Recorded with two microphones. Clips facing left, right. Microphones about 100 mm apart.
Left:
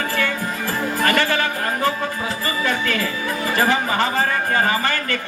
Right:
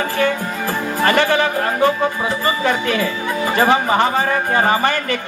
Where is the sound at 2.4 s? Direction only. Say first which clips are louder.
Right 4 dB; 25° right (ahead or behind).